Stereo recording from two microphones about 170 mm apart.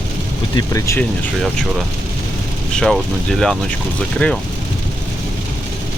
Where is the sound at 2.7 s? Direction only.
5° left (ahead or behind).